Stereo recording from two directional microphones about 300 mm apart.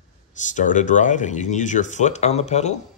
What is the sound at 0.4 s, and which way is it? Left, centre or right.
Speech, left.